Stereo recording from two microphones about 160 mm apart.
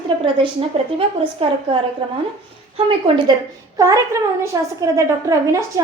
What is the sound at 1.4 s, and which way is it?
Speech, 35° right (ahead or behind).